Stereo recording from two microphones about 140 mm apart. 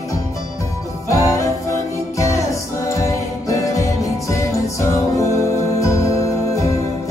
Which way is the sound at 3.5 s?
20° left (ahead or behind).